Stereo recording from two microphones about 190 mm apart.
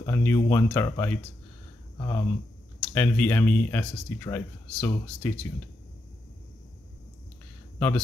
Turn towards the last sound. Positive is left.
turn(degrees=10)  # may be behind; listen again after turning